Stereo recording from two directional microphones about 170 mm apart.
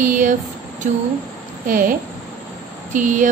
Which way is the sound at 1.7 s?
55° right (ahead or behind).